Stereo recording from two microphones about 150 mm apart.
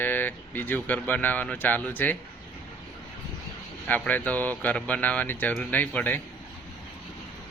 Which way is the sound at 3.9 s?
10° left (ahead or behind).